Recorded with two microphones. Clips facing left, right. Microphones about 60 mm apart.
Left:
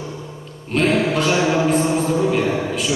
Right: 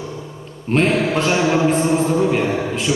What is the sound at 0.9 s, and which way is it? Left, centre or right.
Mantra, centre.